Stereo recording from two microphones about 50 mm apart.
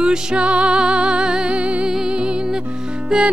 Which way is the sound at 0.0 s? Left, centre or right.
Centre.